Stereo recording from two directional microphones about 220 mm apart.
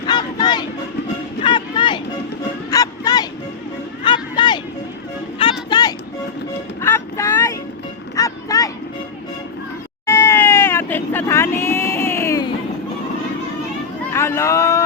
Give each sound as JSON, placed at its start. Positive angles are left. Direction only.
{"t": 0.1, "sound": "a sound", "side_deg": 20}
{"t": 1.4, "sound": "vehicle", "side_deg": 20}
{"t": 2.6, "sound": "music", "side_deg": 15}
{"t": 4.0, "sound": "a sound", "side_deg": 20}
{"t": 5.4, "sound": "music", "side_deg": 20}
{"t": 6.8, "sound": "vehicle", "side_deg": 10}
{"t": 8.1, "sound": "music", "side_deg": 15}
{"t": 10.1, "sound": "vehicle", "side_deg": 10}
{"t": 14.1, "sound": "a sound", "side_deg": 10}